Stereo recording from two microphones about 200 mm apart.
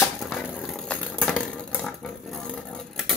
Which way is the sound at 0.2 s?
Centre (ahead or behind).